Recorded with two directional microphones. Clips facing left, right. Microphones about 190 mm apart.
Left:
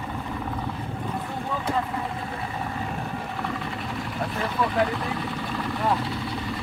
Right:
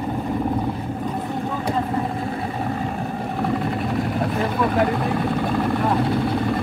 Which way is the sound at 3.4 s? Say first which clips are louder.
Right 8 dB; 50° right (ahead or behind).